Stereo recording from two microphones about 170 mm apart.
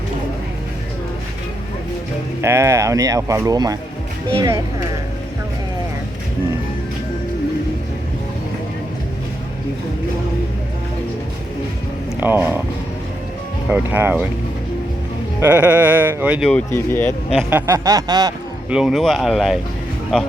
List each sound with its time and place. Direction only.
2.4 s speech: 15° right (ahead or behind)
12.2 s speech: 10° right (ahead or behind)
13.7 s speech: 10° right (ahead or behind)
15.4 s speech: 10° right (ahead or behind)
16.5 s speech: 10° left (ahead or behind)
17.5 s speech: 15° right (ahead or behind)
18.7 s speech: 5° right (ahead or behind)